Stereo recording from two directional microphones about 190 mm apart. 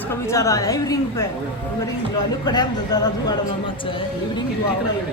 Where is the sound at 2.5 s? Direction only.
20° left (ahead or behind).